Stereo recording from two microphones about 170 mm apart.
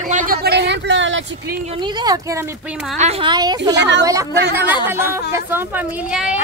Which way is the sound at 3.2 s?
25° right (ahead or behind).